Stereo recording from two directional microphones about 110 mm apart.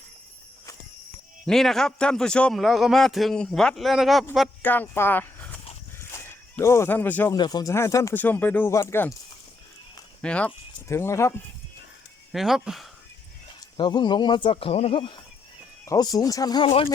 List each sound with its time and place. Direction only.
1.5 s a man's voice: 5° left (ahead or behind)
4.6 s speech: 15° left (ahead or behind)
6.0 s a sound: 25° left (ahead or behind)
7.3 s speech: 40° left (ahead or behind)
7.7 s speech: 25° left (ahead or behind)
8.2 s speech: 15° left (ahead or behind)
10.2 s speech: 10° left (ahead or behind)
10.8 s speech: 25° left (ahead or behind)
12.3 s a man's voice: 5° right (ahead or behind)
13.7 s speech: 45° left (ahead or behind)
15.9 s speech: 35° left (ahead or behind)
16.6 s speech: 60° left (ahead or behind)